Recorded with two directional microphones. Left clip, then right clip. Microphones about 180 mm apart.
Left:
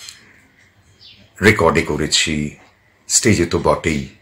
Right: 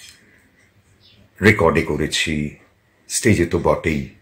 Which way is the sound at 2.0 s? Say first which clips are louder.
Left 3 dB; 15° right (ahead or behind).